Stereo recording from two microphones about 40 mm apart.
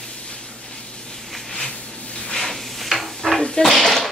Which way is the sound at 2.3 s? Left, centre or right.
Centre.